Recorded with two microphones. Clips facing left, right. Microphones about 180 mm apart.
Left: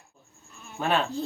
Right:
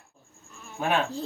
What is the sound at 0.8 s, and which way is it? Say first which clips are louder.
Speech: even; 10° right (ahead or behind).